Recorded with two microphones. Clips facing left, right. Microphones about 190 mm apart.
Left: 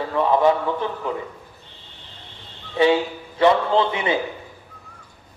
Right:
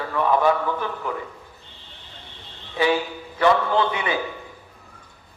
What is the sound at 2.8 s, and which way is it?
A man's voice, 25° left (ahead or behind).